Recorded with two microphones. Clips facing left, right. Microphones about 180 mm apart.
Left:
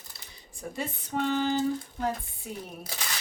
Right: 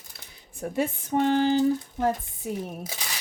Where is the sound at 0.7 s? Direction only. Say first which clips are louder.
Right 7 dB; 50° right (ahead or behind).